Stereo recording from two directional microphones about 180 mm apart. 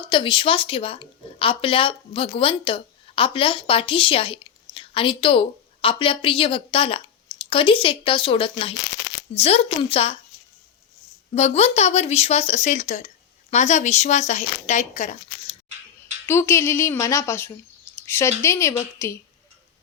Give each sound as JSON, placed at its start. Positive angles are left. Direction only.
{"t": 0.1, "sound": "a woman's voice", "side_deg": 30}
{"t": 11.3, "sound": "speech", "side_deg": 35}
{"t": 16.2, "sound": "a woman's voice", "side_deg": 15}